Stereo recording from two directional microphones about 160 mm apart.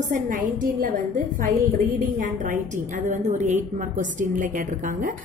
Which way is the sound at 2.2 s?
50° right (ahead or behind).